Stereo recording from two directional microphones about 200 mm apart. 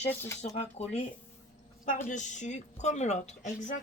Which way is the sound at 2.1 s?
35° left (ahead or behind).